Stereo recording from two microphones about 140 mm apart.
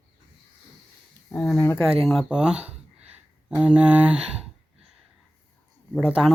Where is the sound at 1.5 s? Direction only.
15° left (ahead or behind).